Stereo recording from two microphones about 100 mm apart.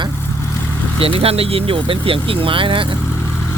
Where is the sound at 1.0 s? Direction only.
70° right (ahead or behind).